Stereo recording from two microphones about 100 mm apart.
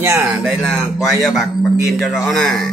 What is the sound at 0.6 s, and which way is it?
Speech, centre (ahead or behind).